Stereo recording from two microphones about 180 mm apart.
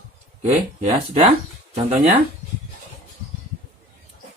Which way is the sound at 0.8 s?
35° right (ahead or behind).